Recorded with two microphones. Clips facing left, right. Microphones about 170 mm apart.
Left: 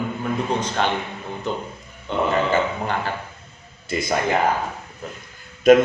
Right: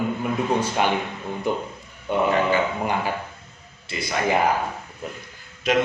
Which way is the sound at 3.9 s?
45° left (ahead or behind).